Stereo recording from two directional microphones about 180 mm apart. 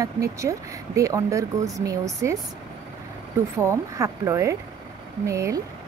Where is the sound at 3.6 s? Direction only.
15° right (ahead or behind).